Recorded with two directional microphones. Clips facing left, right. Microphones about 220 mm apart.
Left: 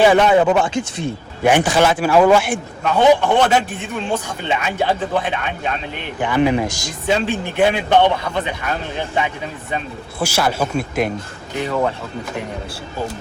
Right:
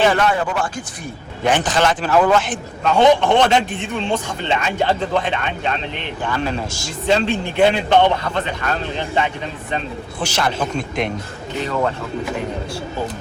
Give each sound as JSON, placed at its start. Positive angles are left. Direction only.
{"t": 0.0, "sound": "speech", "side_deg": 20}
{"t": 1.5, "sound": "a man's voice", "side_deg": 10}
{"t": 7.1, "sound": "a man's voice", "side_deg": 5}